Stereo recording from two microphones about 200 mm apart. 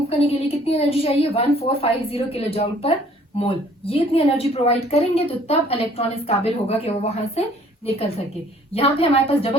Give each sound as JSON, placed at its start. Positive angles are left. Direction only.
{"t": 0.1, "sound": "a woman's voice", "side_deg": 30}
{"t": 8.7, "sound": "a woman's voice", "side_deg": 30}